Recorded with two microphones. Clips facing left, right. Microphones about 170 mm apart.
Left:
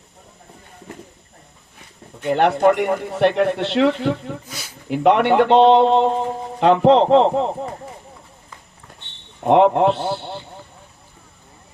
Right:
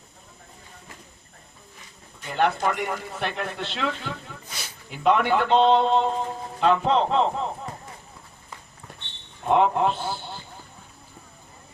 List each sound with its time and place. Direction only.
2.2 s speech: 70° left (ahead or behind)
9.4 s speech: 70° left (ahead or behind)